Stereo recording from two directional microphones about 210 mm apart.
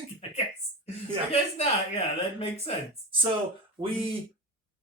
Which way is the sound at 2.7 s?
30° left (ahead or behind).